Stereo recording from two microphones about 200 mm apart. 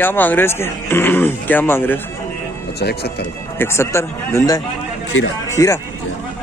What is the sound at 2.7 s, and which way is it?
Speech, 55° left (ahead or behind).